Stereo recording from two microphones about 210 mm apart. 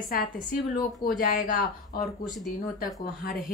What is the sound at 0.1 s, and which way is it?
A woman's voice, 45° left (ahead or behind).